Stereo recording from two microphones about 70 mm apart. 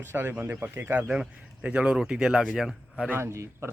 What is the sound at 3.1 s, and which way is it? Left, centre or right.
Speech, right.